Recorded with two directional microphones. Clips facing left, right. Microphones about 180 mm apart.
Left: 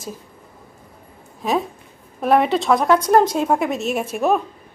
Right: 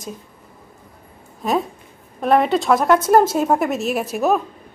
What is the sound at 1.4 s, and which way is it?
A woman's voice, centre (ahead or behind).